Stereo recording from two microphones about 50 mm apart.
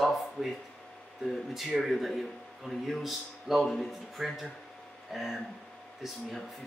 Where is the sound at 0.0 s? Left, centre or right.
Centre.